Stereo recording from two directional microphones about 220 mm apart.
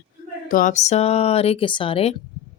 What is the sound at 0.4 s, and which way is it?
Speech, 35° left (ahead or behind).